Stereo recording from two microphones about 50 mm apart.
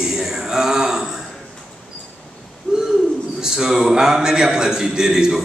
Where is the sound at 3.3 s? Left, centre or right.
Centre.